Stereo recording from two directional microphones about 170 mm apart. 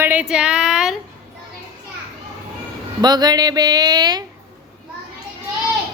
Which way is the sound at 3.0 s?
25° right (ahead or behind).